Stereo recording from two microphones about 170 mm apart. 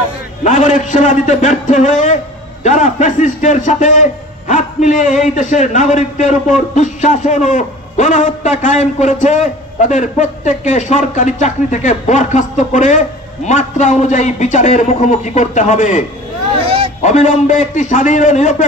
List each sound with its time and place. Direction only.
0.4 s a man's voice: 45° left (ahead or behind)
16.5 s a sound: 30° right (ahead or behind)
17.0 s a man's voice: 45° left (ahead or behind)